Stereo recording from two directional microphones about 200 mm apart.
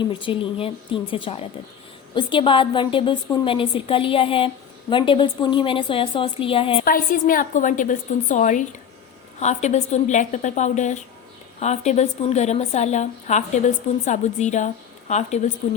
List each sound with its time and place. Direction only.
0.0 s a woman's voice: 25° left (ahead or behind)
6.8 s a woman's voice: 45° left (ahead or behind)